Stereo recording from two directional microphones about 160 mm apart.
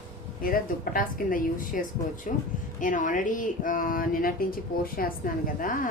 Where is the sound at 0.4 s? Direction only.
65° left (ahead or behind).